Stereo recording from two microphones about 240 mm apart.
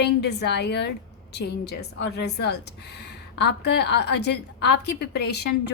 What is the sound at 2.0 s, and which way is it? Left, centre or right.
A woman's voice, left.